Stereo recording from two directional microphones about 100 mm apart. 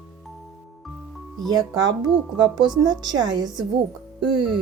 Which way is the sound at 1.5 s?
40° right (ahead or behind).